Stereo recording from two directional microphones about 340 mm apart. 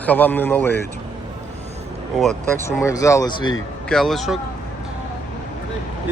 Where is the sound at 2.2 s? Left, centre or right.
Centre.